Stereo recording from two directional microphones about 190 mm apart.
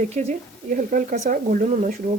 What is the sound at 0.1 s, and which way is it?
Speech, 35° right (ahead or behind).